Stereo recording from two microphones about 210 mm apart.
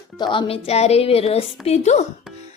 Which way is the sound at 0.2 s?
25° left (ahead or behind).